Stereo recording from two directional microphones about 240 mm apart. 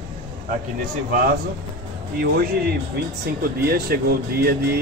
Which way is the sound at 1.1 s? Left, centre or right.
Right.